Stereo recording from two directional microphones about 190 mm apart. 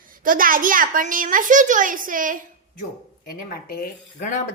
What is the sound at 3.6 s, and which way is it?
Speech, 45° left (ahead or behind).